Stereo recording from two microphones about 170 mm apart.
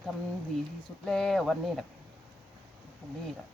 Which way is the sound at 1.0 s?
5° left (ahead or behind).